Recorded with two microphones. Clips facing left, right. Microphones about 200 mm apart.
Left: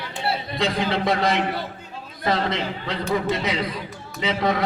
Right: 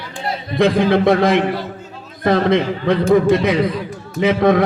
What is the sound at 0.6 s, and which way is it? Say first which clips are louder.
A man's voice: right 11 dB; 55° right (ahead or behind).